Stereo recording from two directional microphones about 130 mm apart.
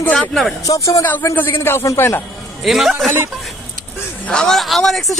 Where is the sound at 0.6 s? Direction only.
25° left (ahead or behind).